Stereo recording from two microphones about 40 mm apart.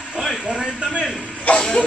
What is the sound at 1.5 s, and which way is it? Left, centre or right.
Music, left.